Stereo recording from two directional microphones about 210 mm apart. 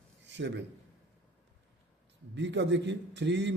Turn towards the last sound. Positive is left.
turn(degrees=-55)  # may be behind; listen again after turning